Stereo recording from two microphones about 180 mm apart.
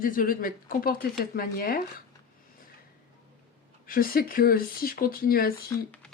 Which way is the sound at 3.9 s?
55° left (ahead or behind).